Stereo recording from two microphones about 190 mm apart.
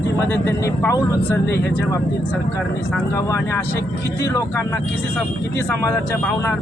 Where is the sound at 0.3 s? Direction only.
15° left (ahead or behind).